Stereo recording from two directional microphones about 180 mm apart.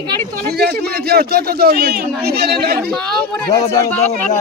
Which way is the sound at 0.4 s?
60° right (ahead or behind).